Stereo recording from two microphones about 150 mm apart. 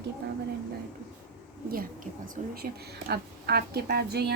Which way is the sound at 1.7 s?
70° right (ahead or behind).